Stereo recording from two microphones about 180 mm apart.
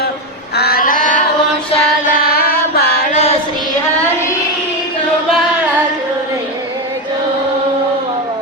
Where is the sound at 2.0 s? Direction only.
55° left (ahead or behind).